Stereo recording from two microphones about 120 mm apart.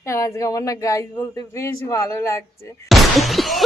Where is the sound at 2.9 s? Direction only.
Centre (ahead or behind).